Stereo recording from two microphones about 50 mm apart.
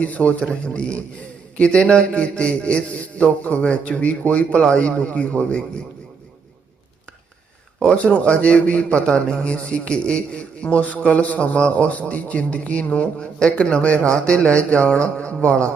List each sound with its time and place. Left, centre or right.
0.0 s a man's voice: left
7.9 s a man's voice: left